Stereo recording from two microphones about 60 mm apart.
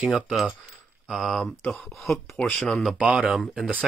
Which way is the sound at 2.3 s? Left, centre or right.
Left.